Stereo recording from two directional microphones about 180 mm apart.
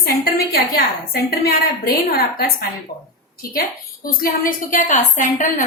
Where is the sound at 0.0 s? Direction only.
60° left (ahead or behind).